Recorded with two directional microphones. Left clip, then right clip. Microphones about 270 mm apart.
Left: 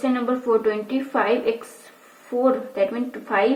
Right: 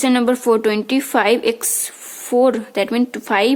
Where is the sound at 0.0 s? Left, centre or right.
Right.